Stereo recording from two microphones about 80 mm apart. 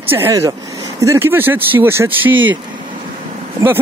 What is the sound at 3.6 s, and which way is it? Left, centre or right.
Speech, right.